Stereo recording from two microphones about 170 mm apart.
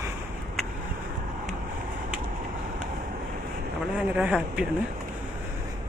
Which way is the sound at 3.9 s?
5° right (ahead or behind).